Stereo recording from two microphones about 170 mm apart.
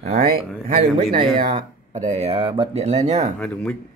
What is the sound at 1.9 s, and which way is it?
Speech, 45° right (ahead or behind).